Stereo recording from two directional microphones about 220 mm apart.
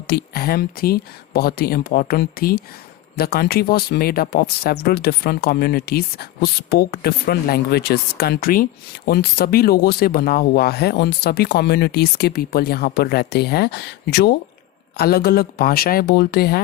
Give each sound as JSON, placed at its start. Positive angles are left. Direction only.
{"t": 0.1, "sound": "speech", "side_deg": 45}